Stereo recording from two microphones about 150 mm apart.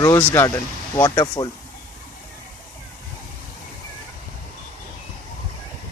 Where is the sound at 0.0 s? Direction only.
20° left (ahead or behind).